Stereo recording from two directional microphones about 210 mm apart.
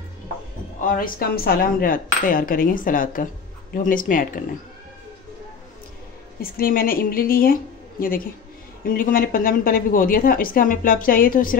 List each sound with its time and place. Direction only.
0.7 s speech: 40° left (ahead or behind)
6.4 s a woman's voice: 45° left (ahead or behind)
8.8 s a woman's voice: 40° left (ahead or behind)